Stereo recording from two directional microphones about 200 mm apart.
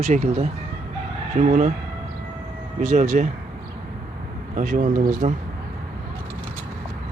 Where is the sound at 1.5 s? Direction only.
40° right (ahead or behind).